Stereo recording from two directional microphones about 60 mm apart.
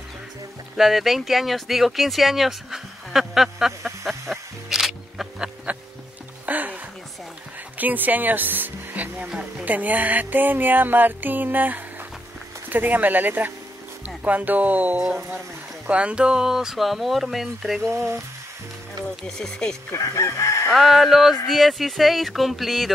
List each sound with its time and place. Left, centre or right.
0.7 s speech: centre
6.4 s music: right
7.7 s speech: right
9.3 s speech: centre
9.7 s music: right
14.0 s speech: right; by 17.8 s centre
17.8 s frying: right
19.2 s speech: centre
19.9 s chicken: left
20.7 s speech: centre